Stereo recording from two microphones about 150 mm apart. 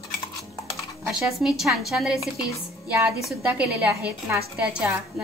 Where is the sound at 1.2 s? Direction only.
Centre (ahead or behind).